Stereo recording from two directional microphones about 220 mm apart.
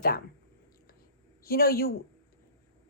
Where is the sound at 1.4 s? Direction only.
45° left (ahead or behind).